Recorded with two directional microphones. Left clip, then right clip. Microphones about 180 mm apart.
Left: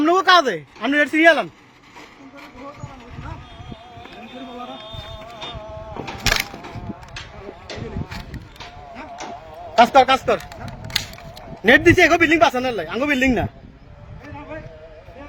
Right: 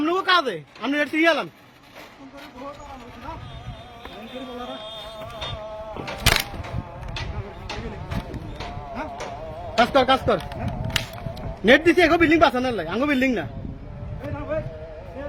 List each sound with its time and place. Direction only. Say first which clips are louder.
0.0 s speech: left 6 dB; 30° left (ahead or behind)
9.7 s speech: left 5 dB; 35° left (ahead or behind)
11.6 s speech: left 3 dB; 35° left (ahead or behind)